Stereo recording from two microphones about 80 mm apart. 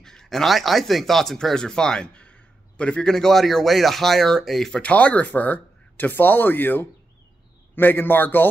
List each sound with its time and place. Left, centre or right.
0.0 s a man's voice: centre; by 8.5 s left